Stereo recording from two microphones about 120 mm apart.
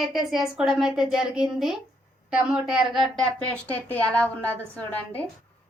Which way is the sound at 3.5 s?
10° left (ahead or behind).